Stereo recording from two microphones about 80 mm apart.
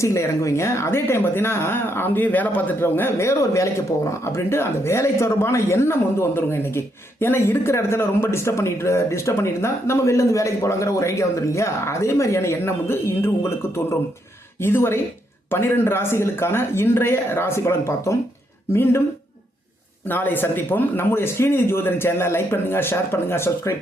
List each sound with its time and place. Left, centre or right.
0.0 s speech: left
20.1 s speech: left